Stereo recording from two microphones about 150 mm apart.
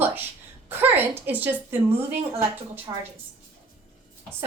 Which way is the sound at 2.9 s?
35° right (ahead or behind).